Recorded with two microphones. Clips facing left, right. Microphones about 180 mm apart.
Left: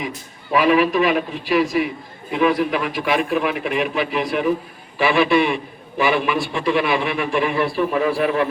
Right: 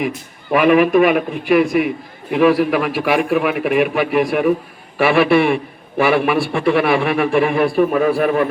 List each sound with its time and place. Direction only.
0.5 s a man's voice: 60° right (ahead or behind)